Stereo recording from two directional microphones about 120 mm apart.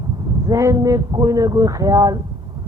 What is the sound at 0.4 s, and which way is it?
Speech, 25° right (ahead or behind).